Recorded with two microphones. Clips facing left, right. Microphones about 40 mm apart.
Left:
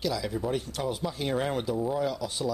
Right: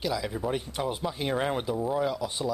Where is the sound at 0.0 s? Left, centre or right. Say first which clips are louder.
Even; centre.